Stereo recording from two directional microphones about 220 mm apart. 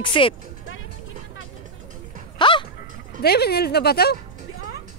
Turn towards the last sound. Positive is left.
turn(degrees=45)  # may be behind; listen again after turning